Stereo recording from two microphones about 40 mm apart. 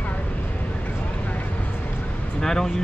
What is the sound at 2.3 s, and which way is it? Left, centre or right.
Speech, centre.